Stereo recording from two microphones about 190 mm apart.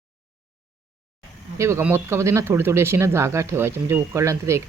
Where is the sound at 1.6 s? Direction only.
15° right (ahead or behind).